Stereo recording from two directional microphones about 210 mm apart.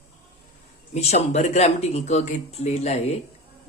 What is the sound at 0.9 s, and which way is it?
Speech, 30° left (ahead or behind).